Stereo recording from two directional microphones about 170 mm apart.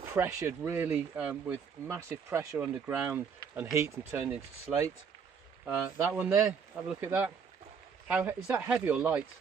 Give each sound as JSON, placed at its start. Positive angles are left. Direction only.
{"t": 0.1, "sound": "speech", "side_deg": -15}
{"t": 3.7, "sound": "speech", "side_deg": -15}